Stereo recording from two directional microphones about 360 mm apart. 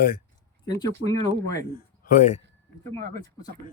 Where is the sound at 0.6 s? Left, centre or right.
Centre.